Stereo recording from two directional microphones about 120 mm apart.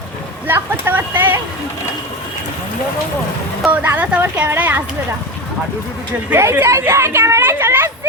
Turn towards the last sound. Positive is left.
turn(degrees=-20)  # may be behind; listen again after turning